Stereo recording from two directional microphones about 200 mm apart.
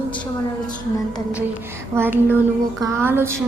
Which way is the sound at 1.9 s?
10° right (ahead or behind).